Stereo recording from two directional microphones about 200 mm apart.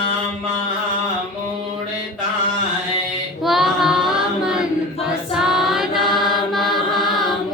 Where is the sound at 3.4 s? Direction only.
Centre (ahead or behind).